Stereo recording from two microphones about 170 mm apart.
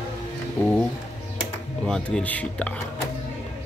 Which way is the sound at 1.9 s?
5° left (ahead or behind).